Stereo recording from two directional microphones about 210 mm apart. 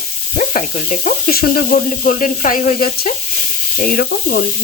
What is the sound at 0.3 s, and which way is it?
Sizzle, 35° left (ahead or behind).